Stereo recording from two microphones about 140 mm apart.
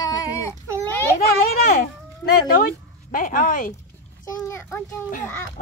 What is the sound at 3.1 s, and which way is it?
Speech, 75° left (ahead or behind).